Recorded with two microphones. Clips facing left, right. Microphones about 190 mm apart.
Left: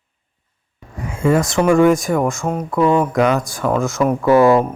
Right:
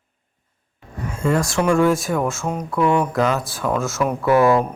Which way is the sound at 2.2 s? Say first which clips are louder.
Left 4 dB; 15° left (ahead or behind).